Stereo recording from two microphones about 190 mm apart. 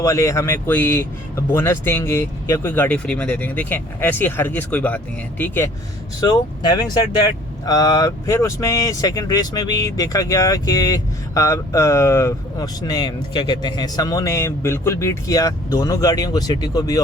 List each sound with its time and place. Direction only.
0.0 s speech: 15° left (ahead or behind)